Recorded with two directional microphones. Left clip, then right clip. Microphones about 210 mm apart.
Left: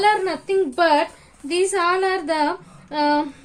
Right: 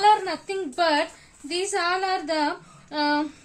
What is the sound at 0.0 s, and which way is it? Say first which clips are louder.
A woman's voice: left 1 dB; 40° left (ahead or behind).